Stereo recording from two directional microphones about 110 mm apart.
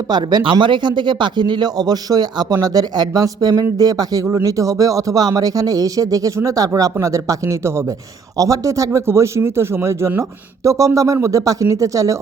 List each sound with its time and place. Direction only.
0.1 s speech: 40° right (ahead or behind)